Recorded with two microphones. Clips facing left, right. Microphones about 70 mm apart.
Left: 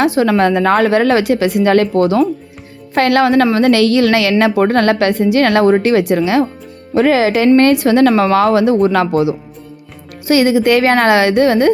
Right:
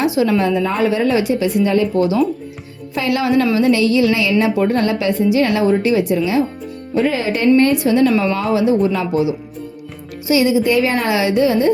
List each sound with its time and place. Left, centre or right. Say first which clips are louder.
0.0 s a woman's voice: left 4 dB; left
6.9 s a woman's voice: left 6 dB; left